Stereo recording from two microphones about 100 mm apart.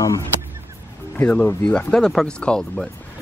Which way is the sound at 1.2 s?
10° left (ahead or behind).